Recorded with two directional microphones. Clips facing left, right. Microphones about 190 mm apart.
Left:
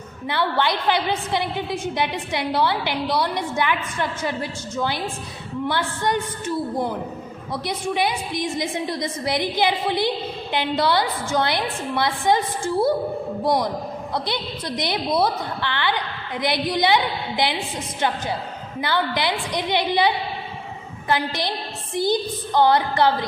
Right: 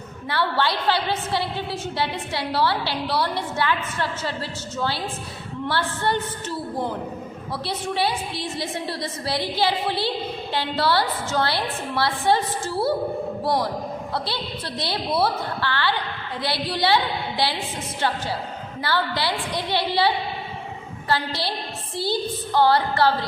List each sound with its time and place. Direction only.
0.3 s a woman's voice: 20° left (ahead or behind)
14.1 s a woman's voice: 15° left (ahead or behind)
18.8 s a woman's voice: 20° left (ahead or behind)